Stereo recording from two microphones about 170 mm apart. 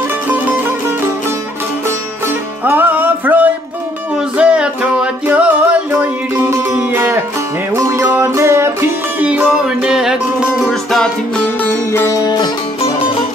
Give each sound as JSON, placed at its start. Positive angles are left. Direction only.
{"t": 0.3, "sound": "music", "side_deg": -15}
{"t": 2.6, "sound": "music", "side_deg": -10}
{"t": 11.6, "sound": "music", "side_deg": 15}